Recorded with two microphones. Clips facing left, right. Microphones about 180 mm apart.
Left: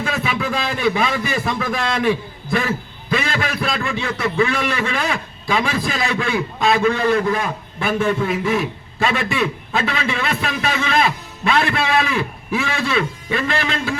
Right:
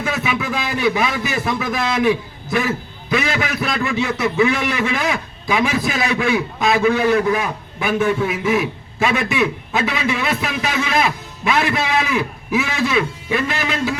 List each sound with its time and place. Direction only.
0.1 s a man's voice: 5° right (ahead or behind)
6.6 s a man's voice: 5° right (ahead or behind)
12.5 s a man's voice: 5° right (ahead or behind)